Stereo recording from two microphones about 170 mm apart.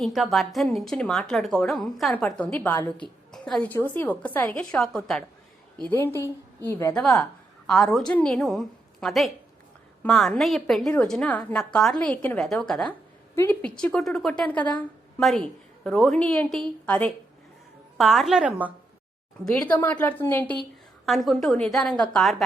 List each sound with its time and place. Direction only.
0.0 s a woman's voice: centre (ahead or behind)
5.9 s a woman's voice: 15° left (ahead or behind)
6.9 s a woman's voice: 5° left (ahead or behind)
19.5 s a woman's voice: 5° left (ahead or behind)